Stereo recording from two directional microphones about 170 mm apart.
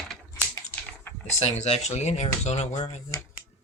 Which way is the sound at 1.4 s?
40° left (ahead or behind).